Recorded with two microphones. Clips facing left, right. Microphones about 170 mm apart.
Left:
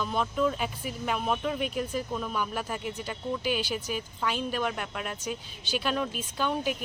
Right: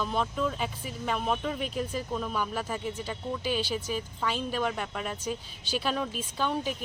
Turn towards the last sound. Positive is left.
turn(degrees=0)  # may be behind; listen again after turning